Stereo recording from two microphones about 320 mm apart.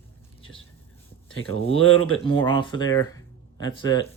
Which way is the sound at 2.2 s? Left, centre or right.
Centre.